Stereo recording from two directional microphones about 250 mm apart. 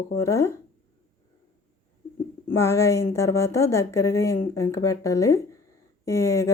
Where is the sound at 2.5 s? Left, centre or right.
Centre.